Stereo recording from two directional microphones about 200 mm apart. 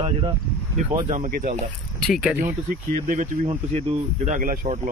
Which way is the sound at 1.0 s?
40° right (ahead or behind).